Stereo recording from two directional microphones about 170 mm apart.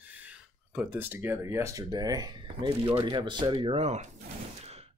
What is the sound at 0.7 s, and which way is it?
Speech, 10° right (ahead or behind).